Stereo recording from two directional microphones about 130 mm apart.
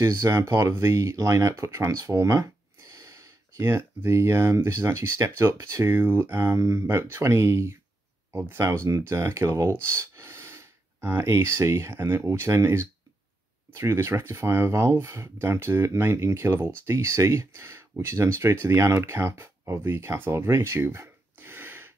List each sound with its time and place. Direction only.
0.0 s speech: 20° right (ahead or behind)